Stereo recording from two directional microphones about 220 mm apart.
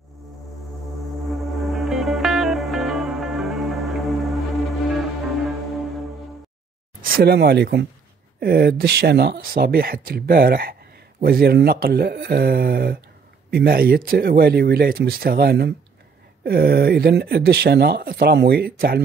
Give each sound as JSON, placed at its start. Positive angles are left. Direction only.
{"t": 1.3, "sound": "music", "side_deg": 0}
{"t": 7.0, "sound": "speech", "side_deg": -45}